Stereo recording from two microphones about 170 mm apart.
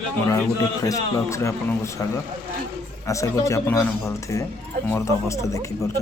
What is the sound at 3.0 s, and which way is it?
Speech, 20° left (ahead or behind).